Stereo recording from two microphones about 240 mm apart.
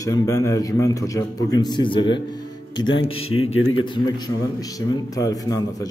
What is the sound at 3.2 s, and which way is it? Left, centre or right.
Speech, left.